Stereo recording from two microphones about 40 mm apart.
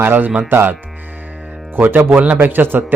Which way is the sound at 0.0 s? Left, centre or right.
Right.